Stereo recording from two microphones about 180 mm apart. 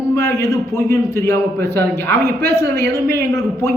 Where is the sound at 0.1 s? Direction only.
15° left (ahead or behind).